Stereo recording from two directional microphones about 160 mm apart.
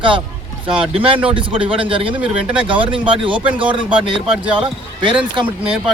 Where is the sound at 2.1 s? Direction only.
10° right (ahead or behind).